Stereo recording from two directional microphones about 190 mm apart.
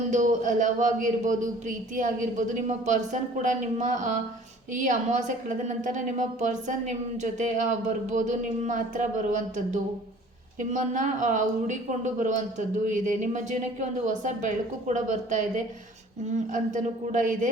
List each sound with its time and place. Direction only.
0.1 s a woman's voice: 40° right (ahead or behind)